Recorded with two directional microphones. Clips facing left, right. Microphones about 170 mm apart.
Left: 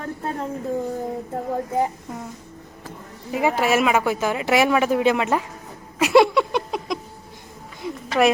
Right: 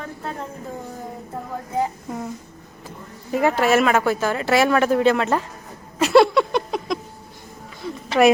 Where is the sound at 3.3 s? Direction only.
5° left (ahead or behind).